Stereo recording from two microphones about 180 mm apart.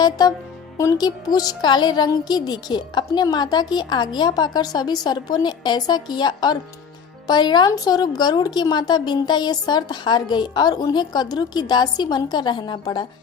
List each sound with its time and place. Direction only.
0.0 s a woman's voice: 20° left (ahead or behind)